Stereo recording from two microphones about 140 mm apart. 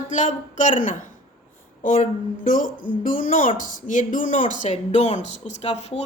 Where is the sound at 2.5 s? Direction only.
70° left (ahead or behind).